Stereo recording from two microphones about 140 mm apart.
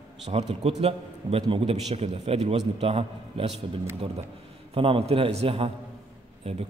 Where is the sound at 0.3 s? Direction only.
45° right (ahead or behind).